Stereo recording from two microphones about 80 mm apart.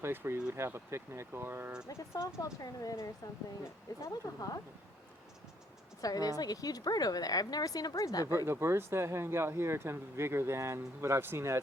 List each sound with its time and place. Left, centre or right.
0.0 s speech: right
1.9 s speech: left
2.4 s a woman's voice: left
6.0 s a woman's voice: left
8.4 s speech: right